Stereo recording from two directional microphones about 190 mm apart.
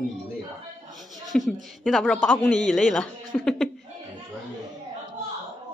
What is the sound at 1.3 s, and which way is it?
A woman's voice, centre (ahead or behind).